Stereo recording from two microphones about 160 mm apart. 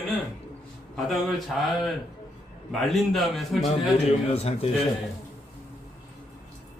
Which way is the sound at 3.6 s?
40° left (ahead or behind).